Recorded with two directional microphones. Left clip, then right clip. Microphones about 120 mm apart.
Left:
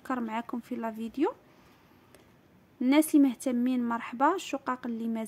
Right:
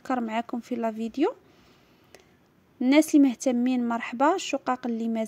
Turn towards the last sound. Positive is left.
turn(degrees=-30)  # may be behind; listen again after turning